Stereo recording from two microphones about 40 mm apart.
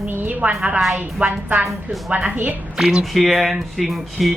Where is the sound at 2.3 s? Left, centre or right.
Right.